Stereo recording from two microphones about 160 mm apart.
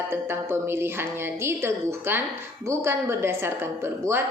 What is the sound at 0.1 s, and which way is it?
A woman's voice, 15° right (ahead or behind).